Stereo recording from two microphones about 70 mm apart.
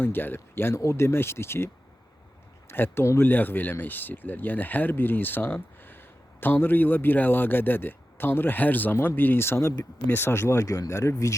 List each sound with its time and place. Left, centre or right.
0.0 s speech: left